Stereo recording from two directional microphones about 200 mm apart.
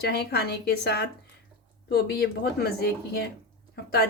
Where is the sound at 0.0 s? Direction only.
55° left (ahead or behind).